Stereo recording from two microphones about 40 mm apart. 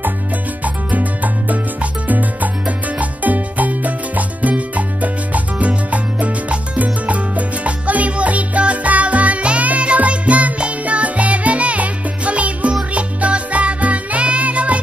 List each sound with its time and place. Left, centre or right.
0.9 s salsa music: right
12.9 s music: right